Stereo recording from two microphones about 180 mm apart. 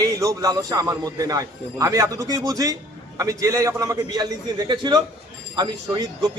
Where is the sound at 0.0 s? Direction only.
20° right (ahead or behind).